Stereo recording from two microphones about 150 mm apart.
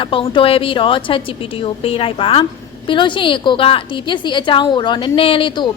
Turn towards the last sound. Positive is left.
turn(degrees=30)  # may be behind; listen again after turning